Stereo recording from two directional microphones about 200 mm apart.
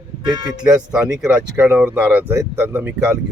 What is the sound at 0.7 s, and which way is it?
Speech, 5° right (ahead or behind).